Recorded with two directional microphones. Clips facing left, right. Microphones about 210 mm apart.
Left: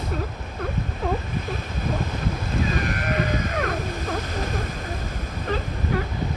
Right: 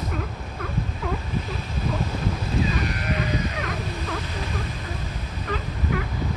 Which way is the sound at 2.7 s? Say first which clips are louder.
Left 1 dB; 50° left (ahead or behind).